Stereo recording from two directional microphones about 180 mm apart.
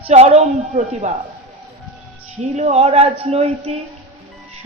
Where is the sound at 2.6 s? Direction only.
35° right (ahead or behind).